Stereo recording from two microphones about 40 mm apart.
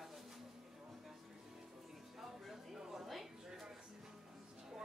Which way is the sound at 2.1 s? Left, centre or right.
Centre.